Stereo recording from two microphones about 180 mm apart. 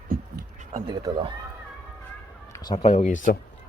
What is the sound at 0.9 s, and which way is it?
Speech, 25° right (ahead or behind).